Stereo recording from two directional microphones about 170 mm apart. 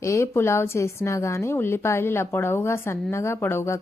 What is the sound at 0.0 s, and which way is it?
A woman's voice, 15° left (ahead or behind).